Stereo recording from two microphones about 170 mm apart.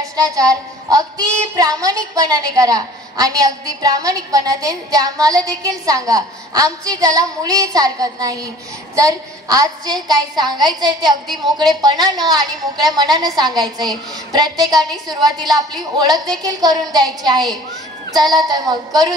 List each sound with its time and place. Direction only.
0.0 s child singing: 20° right (ahead or behind)
13.6 s a woman's voice: centre (ahead or behind)
14.3 s child singing: 25° right (ahead or behind)